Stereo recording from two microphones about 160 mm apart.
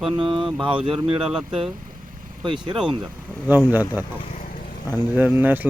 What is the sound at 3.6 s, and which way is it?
Speech, 10° right (ahead or behind).